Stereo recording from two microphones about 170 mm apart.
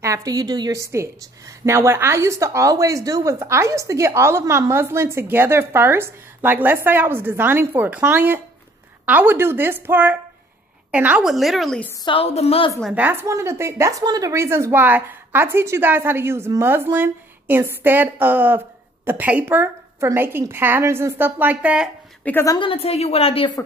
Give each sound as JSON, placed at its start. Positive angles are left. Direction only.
{"t": 0.0, "sound": "a woman's voice", "side_deg": -20}
{"t": 12.0, "sound": "a woman's voice", "side_deg": 30}
{"t": 12.9, "sound": "a woman's voice", "side_deg": -10}
{"t": 22.2, "sound": "a woman's voice", "side_deg": 15}
{"t": 22.6, "sound": "a woman's voice", "side_deg": 35}